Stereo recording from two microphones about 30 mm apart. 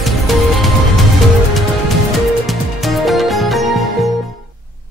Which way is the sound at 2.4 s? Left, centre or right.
Centre.